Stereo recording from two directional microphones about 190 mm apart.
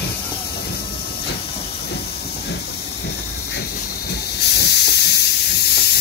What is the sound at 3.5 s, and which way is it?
Hiss, 60° left (ahead or behind).